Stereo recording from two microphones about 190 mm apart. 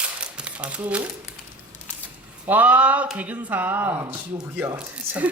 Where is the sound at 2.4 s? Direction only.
10° right (ahead or behind).